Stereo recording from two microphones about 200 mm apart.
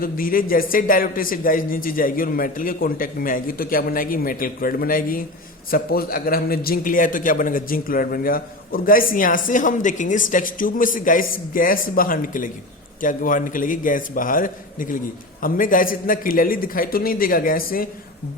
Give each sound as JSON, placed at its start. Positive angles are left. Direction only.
{"t": 0.0, "sound": "a man's voice", "side_deg": 45}